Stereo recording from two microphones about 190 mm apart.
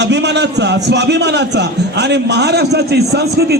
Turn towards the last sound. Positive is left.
turn(degrees=-60)  # may be behind; listen again after turning